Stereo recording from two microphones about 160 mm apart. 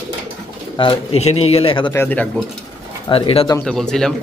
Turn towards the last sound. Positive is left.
turn(degrees=5)  # may be behind; listen again after turning